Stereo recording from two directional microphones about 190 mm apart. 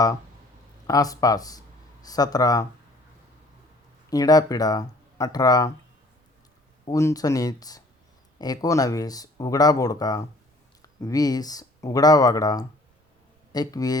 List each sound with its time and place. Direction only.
0.9 s speech: 20° left (ahead or behind)
4.1 s speech: 20° left (ahead or behind)
6.8 s speech: 15° left (ahead or behind)